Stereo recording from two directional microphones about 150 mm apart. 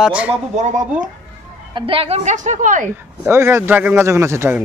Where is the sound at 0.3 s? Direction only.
55° right (ahead or behind).